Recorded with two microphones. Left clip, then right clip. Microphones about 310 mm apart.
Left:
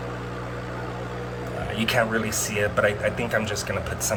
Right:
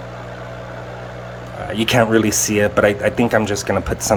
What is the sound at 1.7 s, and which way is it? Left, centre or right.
Speech, right.